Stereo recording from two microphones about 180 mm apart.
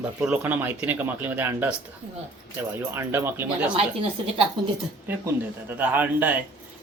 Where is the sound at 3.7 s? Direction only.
30° right (ahead or behind).